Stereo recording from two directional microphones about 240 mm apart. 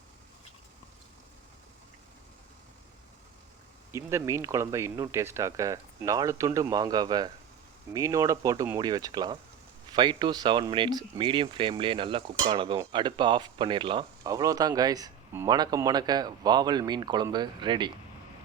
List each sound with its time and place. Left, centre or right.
3.9 s speech: centre